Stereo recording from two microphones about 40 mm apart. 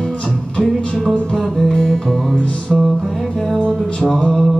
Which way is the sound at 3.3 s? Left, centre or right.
Left.